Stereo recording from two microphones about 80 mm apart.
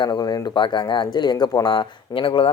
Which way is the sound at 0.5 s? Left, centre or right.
Left.